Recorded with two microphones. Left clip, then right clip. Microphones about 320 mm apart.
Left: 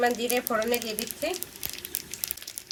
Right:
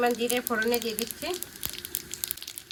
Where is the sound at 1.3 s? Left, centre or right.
Centre.